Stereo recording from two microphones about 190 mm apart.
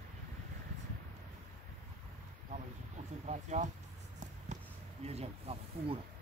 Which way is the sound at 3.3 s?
40° right (ahead or behind).